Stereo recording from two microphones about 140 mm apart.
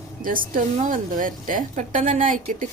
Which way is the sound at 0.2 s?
80° right.